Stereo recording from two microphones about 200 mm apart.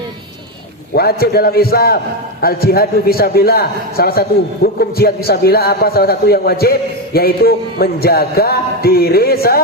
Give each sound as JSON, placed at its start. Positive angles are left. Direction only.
{"t": 0.9, "sound": "a man's voice", "side_deg": 50}